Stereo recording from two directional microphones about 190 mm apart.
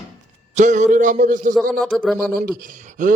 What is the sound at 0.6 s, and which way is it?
Speech, 40° right (ahead or behind).